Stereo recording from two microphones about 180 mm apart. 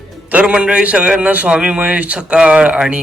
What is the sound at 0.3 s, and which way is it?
A man's voice, 5° right (ahead or behind).